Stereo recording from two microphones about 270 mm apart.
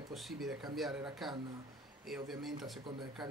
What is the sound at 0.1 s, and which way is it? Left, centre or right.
Speech, centre.